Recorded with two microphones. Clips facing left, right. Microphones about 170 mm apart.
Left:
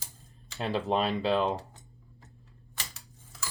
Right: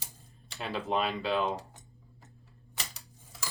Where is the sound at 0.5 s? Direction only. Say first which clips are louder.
Left 3 dB; 30° left (ahead or behind).